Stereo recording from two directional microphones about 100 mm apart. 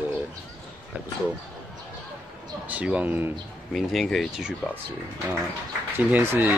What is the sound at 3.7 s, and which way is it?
Speech, centre (ahead or behind).